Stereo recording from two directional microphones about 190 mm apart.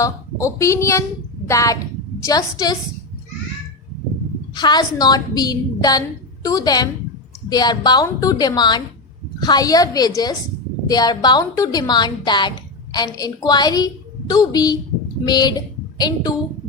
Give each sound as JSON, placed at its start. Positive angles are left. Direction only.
{"t": 0.0, "sound": "a woman's voice", "side_deg": 15}
{"t": 4.5, "sound": "a woman's voice", "side_deg": 20}